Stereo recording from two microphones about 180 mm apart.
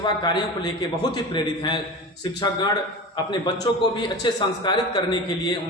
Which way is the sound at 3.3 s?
25° left (ahead or behind).